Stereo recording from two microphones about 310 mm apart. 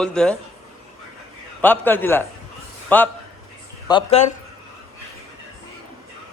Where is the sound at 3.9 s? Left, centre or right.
Centre.